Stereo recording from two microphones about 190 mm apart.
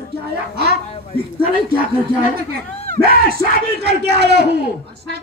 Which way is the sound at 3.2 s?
55° right (ahead or behind).